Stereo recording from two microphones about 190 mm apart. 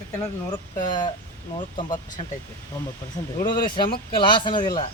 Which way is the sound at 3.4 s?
25° left (ahead or behind).